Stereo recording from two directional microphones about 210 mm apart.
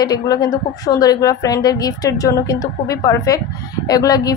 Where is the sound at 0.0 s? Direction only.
20° left (ahead or behind).